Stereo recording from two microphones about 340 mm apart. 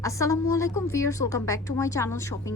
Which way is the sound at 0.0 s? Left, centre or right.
Centre.